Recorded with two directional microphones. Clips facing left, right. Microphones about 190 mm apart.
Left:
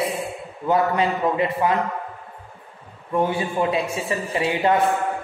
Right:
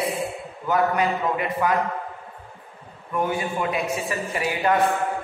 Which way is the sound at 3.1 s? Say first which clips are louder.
Left 3 dB; 30° left (ahead or behind).